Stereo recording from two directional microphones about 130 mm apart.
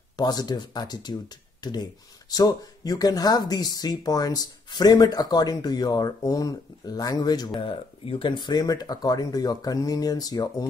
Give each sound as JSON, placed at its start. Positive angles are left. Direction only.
{"t": 0.2, "sound": "speech", "side_deg": 30}